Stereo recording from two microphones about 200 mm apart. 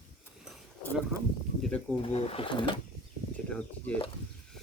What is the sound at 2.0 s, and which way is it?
Speech, 30° left (ahead or behind).